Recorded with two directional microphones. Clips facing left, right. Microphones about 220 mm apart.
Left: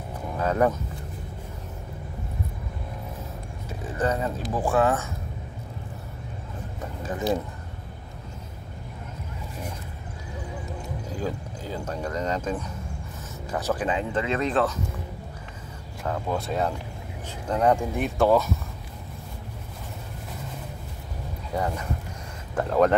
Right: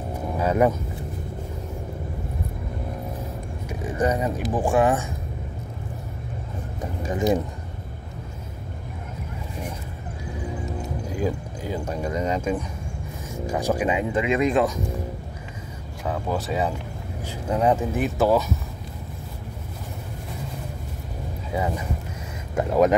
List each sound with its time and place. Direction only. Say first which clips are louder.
0.4 s speech: right 2 dB; 10° right (ahead or behind)
3.6 s speech: right 3 dB; 15° right (ahead or behind)
7.0 s speech: right 4 dB; 15° right (ahead or behind)
11.1 s speech: right 5 dB; 15° right (ahead or behind)
16.0 s speech: right 1 dB; 5° right (ahead or behind)
21.5 s speech: right 1 dB; 5° right (ahead or behind)